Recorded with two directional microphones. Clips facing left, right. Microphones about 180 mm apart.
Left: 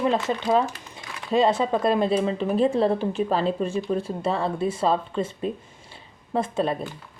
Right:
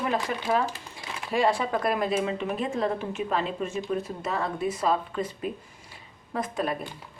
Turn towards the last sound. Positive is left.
turn(degrees=25)  # may be behind; listen again after turning